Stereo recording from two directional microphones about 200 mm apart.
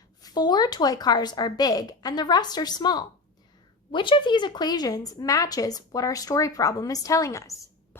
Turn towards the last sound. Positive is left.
turn(degrees=15)  # may be behind; listen again after turning